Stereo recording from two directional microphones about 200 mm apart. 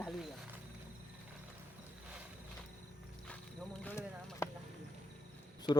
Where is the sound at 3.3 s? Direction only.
5° left (ahead or behind).